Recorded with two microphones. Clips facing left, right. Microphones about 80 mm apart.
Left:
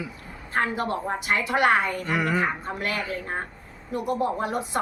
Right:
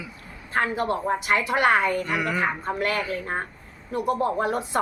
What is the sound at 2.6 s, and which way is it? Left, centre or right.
A woman's voice, right.